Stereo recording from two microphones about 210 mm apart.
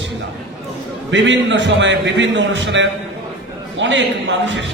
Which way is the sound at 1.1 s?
60° right (ahead or behind).